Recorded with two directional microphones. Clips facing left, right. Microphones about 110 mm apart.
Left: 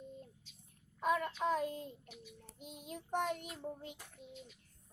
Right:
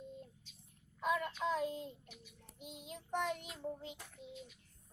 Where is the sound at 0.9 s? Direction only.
45° left (ahead or behind).